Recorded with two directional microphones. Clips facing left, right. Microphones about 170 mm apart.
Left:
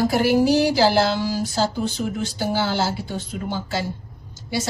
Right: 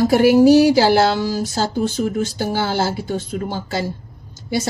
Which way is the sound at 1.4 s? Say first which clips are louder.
Right 2 dB; 45° right (ahead or behind).